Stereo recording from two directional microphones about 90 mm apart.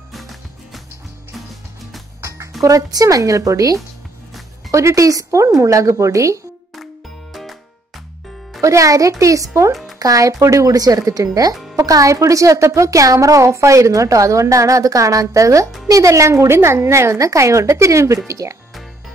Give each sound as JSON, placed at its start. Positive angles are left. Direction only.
{"t": 0.1, "sound": "music", "side_deg": 0}
{"t": 2.2, "sound": "music", "side_deg": -35}
{"t": 2.6, "sound": "speech", "side_deg": -40}
{"t": 8.5, "sound": "speech", "side_deg": -35}